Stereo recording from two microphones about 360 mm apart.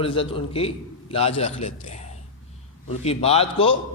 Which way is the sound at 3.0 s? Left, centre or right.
Centre.